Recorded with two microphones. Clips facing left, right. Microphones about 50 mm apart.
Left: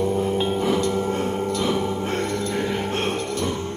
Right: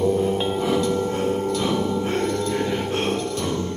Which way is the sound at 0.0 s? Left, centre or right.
Centre.